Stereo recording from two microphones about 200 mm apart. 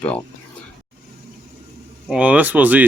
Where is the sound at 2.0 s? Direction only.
5° right (ahead or behind).